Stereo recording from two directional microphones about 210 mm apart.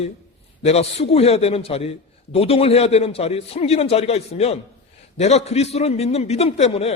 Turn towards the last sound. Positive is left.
turn(degrees=30)  # may be behind; listen again after turning